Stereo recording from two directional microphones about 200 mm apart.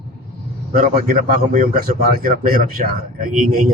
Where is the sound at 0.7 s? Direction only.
45° right (ahead or behind).